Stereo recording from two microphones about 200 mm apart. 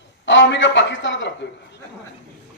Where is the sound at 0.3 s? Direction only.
65° left (ahead or behind).